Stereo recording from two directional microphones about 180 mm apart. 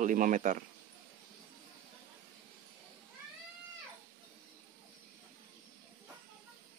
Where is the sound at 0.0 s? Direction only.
45° right (ahead or behind).